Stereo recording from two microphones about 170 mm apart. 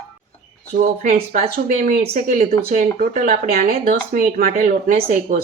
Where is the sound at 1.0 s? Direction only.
50° right (ahead or behind).